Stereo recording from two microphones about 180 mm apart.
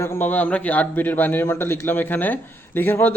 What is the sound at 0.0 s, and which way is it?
A man's voice, 10° left (ahead or behind).